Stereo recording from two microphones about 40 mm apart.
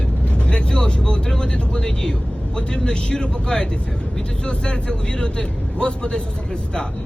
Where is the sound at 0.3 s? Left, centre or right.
Left.